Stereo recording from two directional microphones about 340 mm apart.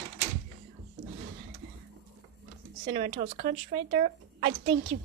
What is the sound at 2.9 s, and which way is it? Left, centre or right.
Speech, right.